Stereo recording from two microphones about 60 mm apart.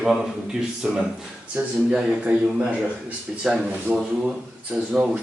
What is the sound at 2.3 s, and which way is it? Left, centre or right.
Speech, right.